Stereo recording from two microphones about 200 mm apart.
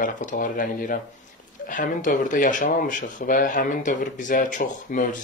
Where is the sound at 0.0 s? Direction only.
40° left (ahead or behind).